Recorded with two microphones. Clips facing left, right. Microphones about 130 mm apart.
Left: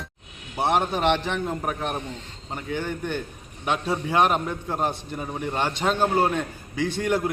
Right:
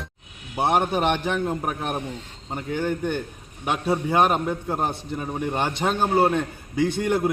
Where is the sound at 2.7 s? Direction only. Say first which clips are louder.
Right 3 dB; 10° right (ahead or behind).